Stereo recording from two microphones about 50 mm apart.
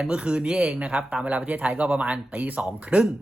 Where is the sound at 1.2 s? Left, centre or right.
Right.